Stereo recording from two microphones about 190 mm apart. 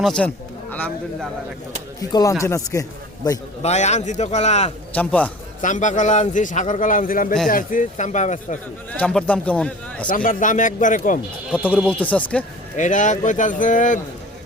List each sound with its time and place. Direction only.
0.0 s a man's voice: 5° left (ahead or behind); by 3.4 s 20° left (ahead or behind)
3.6 s a man's voice: 35° left (ahead or behind)
4.9 s a man's voice: 5° left (ahead or behind)
5.6 s a man's voice: 40° left (ahead or behind)
8.9 s a man's voice: 5° left (ahead or behind)
10.1 s a man's voice: 45° left (ahead or behind)
11.9 s a man's voice: 5° left (ahead or behind)
12.7 s a man's voice: 40° left (ahead or behind)